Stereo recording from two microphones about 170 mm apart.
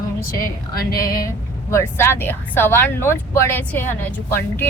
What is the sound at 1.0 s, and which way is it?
A woman's voice, 20° left (ahead or behind).